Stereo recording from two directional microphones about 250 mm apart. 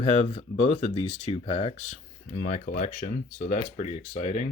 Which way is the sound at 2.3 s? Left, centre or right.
Left.